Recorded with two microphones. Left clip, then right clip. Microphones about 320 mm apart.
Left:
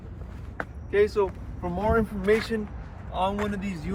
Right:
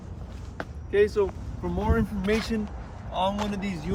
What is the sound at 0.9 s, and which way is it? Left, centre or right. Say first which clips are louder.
Speech: even; left.